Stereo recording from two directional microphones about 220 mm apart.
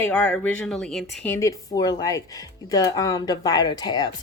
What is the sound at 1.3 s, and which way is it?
A woman's voice, 15° left (ahead or behind).